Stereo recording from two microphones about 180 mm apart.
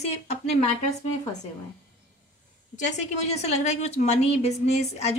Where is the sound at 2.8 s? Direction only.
40° left (ahead or behind).